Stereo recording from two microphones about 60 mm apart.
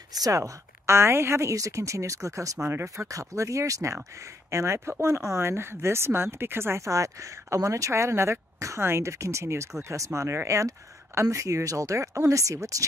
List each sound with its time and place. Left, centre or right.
0.1 s speech: right
0.4 s a woman's voice: right
2.7 s speech: right
3.1 s a woman's voice: right
4.5 s a woman's voice: right